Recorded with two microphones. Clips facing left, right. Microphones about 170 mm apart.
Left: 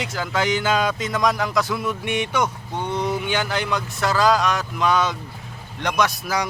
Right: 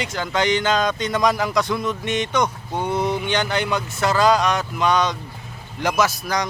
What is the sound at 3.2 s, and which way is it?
Speech, 5° left (ahead or behind).